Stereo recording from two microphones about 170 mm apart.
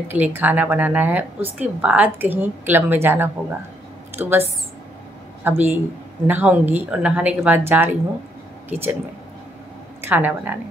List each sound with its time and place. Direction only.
0.1 s speech: 10° right (ahead or behind)
10.0 s speech: 10° right (ahead or behind)